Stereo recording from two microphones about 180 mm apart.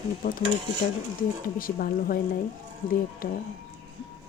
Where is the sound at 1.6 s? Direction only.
55° left (ahead or behind).